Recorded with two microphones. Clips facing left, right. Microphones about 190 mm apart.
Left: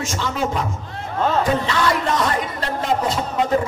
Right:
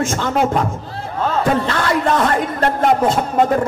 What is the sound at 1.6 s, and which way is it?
Speech, 55° right (ahead or behind).